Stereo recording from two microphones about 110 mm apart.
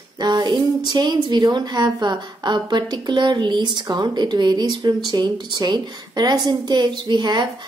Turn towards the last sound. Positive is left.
turn(degrees=-40)  # may be behind; listen again after turning